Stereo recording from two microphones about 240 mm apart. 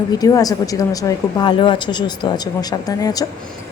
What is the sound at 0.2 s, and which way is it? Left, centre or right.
A woman's voice, centre.